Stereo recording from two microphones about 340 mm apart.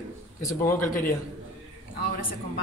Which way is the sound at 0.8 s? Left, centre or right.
Left.